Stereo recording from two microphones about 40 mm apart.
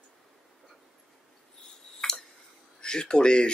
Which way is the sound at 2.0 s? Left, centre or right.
Centre.